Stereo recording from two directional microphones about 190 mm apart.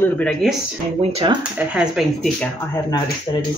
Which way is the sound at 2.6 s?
15° left (ahead or behind).